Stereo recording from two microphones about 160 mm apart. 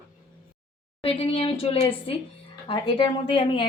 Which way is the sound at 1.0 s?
35° left (ahead or behind).